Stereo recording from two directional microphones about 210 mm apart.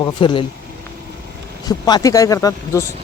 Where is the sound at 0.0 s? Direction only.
20° left (ahead or behind).